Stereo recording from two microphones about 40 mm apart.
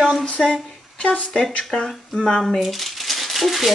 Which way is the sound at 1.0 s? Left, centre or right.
Left.